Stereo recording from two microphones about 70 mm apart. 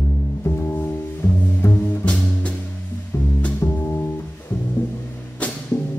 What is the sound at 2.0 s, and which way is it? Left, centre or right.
Music, centre.